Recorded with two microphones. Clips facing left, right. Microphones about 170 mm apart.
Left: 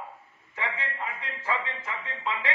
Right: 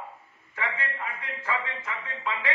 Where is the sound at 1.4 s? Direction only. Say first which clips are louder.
Even; 25° left (ahead or behind).